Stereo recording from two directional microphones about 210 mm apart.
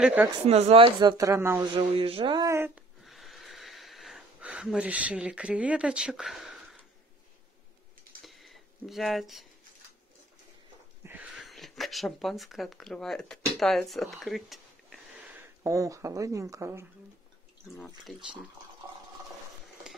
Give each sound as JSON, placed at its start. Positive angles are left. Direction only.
{"t": 0.0, "sound": "speech", "side_deg": -5}
{"t": 0.5, "sound": "speech", "side_deg": -30}
{"t": 1.8, "sound": "a sound", "side_deg": -25}
{"t": 8.2, "sound": "a sound", "side_deg": 0}
{"t": 11.1, "sound": "speech", "side_deg": -5}
{"t": 15.4, "sound": "speech", "side_deg": -15}
{"t": 17.7, "sound": "speech", "side_deg": 5}